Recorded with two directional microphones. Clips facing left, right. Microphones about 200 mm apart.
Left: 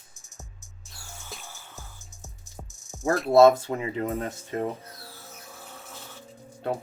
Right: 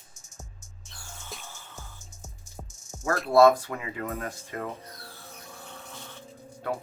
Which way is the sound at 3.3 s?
25° left (ahead or behind).